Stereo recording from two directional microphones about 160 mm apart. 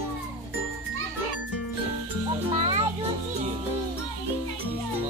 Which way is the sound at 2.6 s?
35° right (ahead or behind).